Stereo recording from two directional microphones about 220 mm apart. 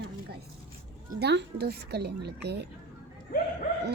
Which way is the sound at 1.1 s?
50° right (ahead or behind).